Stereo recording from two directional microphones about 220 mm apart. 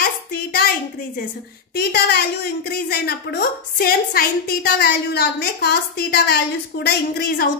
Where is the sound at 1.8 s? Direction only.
45° left (ahead or behind).